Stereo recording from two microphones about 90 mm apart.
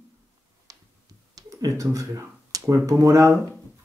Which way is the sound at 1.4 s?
40° right (ahead or behind).